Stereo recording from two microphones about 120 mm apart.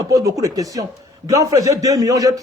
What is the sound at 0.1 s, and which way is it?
A man's voice, 30° right (ahead or behind).